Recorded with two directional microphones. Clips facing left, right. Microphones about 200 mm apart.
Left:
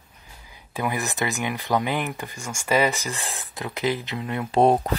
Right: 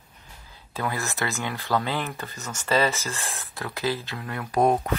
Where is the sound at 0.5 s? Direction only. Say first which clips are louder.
Left 3 dB; 15° left (ahead or behind).